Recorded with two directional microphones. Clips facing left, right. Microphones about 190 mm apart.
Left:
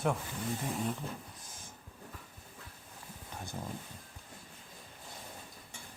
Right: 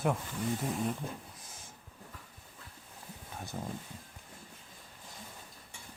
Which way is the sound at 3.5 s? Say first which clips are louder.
Right 2 dB; centre (ahead or behind).